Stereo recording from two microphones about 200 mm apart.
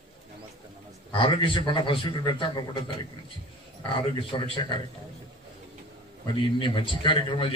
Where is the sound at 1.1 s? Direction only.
25° left (ahead or behind).